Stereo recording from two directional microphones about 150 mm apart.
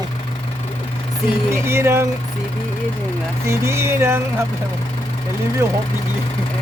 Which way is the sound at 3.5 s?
20° right (ahead or behind).